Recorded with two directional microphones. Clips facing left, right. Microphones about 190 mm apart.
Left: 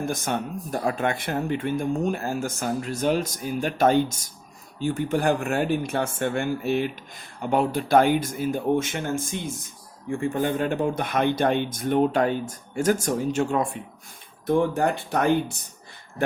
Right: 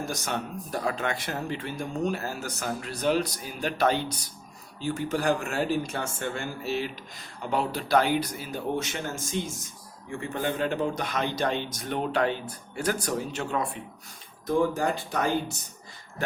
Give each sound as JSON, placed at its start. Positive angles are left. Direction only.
{"t": 0.0, "sound": "a man's voice", "side_deg": 55}
{"t": 14.4, "sound": "speech", "side_deg": 60}